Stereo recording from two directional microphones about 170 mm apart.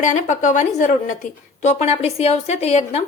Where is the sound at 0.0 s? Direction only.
45° left (ahead or behind).